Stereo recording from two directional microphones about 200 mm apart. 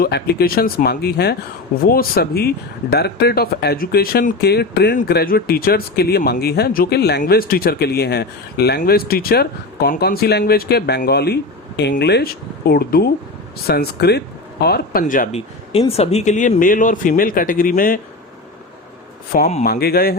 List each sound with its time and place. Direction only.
0.0 s speech: 50° left (ahead or behind)
15.9 s speech: 30° left (ahead or behind)
19.6 s speech: 50° left (ahead or behind)